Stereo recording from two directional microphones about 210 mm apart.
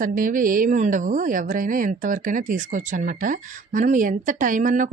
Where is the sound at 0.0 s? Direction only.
40° right (ahead or behind).